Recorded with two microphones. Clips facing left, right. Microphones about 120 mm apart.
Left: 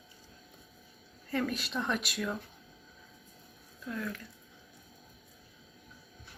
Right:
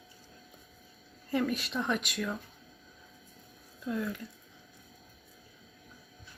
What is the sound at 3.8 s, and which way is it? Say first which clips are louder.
Speech: right 4 dB; 20° right (ahead or behind).